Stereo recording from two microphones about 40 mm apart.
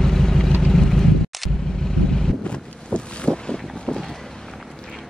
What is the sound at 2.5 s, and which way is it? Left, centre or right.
Boat, left.